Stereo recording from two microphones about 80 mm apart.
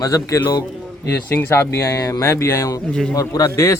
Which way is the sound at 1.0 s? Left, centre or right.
Left.